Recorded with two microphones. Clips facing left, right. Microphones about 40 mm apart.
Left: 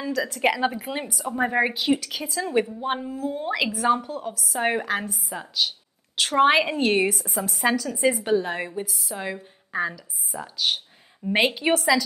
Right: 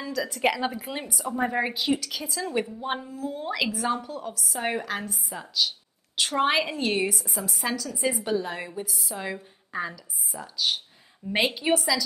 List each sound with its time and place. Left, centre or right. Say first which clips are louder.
0.0 s a woman's voice: left 2 dB; centre
7.2 s a woman's voice: left 4 dB; centre
7.5 s a woman's voice: left 8 dB; left
8.8 s a woman's voice: left 2 dB; centre
11.7 s a woman's voice: left 4 dB; left